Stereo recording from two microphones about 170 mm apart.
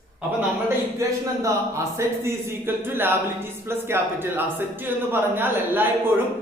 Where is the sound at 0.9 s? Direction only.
15° right (ahead or behind).